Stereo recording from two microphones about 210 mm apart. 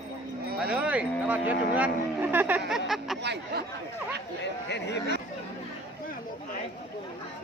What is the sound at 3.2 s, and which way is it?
Speech, 55° right (ahead or behind).